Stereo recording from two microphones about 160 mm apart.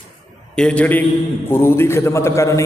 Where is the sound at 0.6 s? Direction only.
5° left (ahead or behind).